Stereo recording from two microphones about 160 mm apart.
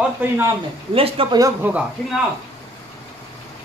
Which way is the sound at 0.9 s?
35° right (ahead or behind).